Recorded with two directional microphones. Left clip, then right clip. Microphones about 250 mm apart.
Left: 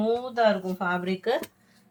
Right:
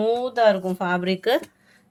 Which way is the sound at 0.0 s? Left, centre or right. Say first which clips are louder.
Right 5 dB; right.